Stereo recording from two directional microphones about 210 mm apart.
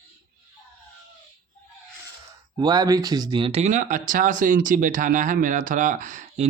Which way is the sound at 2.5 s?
20° right (ahead or behind).